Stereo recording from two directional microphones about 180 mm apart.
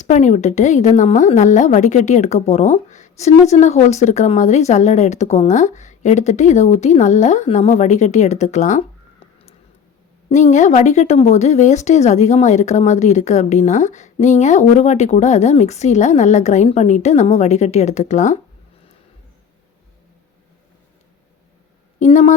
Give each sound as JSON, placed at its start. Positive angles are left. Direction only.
{"t": 0.1, "sound": "a woman's voice", "side_deg": 40}
{"t": 10.2, "sound": "a woman's voice", "side_deg": 40}
{"t": 21.9, "sound": "a woman's voice", "side_deg": 40}